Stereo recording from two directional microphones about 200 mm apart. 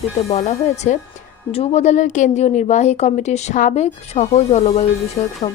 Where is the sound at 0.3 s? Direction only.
35° left (ahead or behind).